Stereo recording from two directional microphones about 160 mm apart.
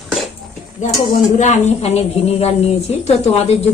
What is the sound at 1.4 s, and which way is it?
A woman's voice, 45° left (ahead or behind).